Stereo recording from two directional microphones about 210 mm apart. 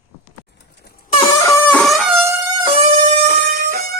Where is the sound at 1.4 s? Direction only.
10° left (ahead or behind).